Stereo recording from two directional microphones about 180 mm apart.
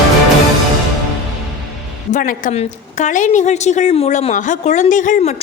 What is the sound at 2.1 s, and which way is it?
A woman's voice, 45° left (ahead or behind).